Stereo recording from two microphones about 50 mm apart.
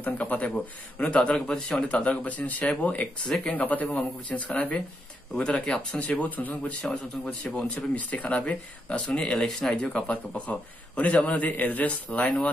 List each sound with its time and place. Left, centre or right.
0.0 s a man's voice: left; by 1.8 s centre
2.0 s a man's voice: left
5.3 s speech: centre; by 6.6 s left
6.8 s speech: centre
7.6 s a man's voice: left